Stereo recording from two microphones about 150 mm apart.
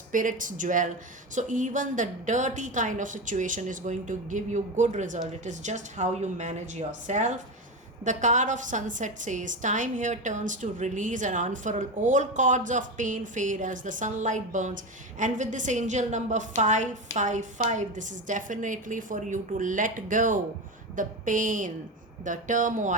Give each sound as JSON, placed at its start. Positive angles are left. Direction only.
{"t": 0.1, "sound": "a woman's voice", "side_deg": -60}